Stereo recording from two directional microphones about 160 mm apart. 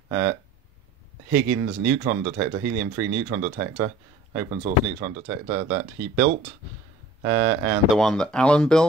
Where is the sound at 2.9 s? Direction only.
10° right (ahead or behind).